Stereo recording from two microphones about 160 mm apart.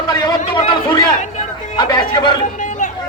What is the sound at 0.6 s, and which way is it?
A man's voice, 25° left (ahead or behind).